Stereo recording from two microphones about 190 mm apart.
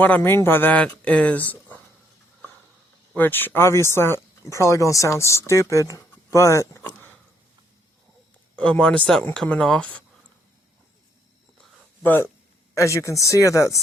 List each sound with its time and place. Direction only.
0.0 s speech: 10° left (ahead or behind)
3.1 s speech: 10° left (ahead or behind)
8.5 s speech: 5° left (ahead or behind)
11.6 s a sound: 10° left (ahead or behind)
12.7 s speech: 15° left (ahead or behind)